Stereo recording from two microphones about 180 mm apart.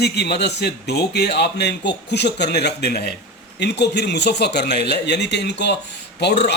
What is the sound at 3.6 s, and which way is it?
A man's voice, 70° left (ahead or behind).